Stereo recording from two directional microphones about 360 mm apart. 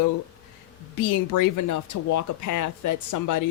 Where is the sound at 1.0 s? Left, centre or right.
Left.